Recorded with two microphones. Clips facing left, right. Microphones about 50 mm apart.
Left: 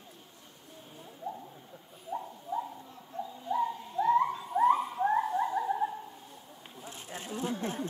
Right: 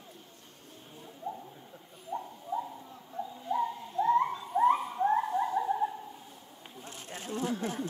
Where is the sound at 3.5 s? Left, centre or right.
Centre.